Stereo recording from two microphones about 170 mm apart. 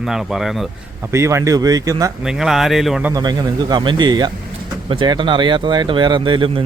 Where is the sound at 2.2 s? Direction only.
Centre (ahead or behind).